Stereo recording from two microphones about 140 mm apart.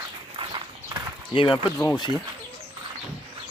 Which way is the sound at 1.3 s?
35° left (ahead or behind).